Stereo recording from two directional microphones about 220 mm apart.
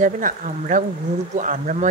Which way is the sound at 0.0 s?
35° right (ahead or behind).